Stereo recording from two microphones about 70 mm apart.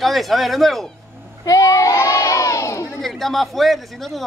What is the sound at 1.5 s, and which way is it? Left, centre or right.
A child's voice, left.